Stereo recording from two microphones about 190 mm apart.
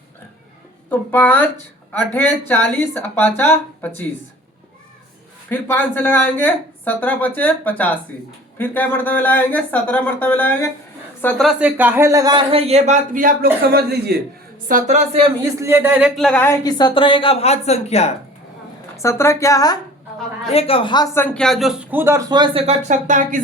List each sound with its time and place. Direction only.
0.9 s speech: 10° left (ahead or behind)
5.5 s a woman's voice: 10° left (ahead or behind)
11.4 s a man's voice: 10° right (ahead or behind); by 14.2 s 55° right (ahead or behind)
14.7 s a woman's voice: 40° right (ahead or behind)
15.6 s speech: 10° right (ahead or behind); by 16.6 s 10° left (ahead or behind)
16.6 s a woman's voice: 20° left (ahead or behind)
18.9 s speech: 15° left (ahead or behind)
20.5 s a woman's voice: 30° left (ahead or behind)
21.2 s speech: 5° left (ahead or behind); by 23.4 s 40° right (ahead or behind)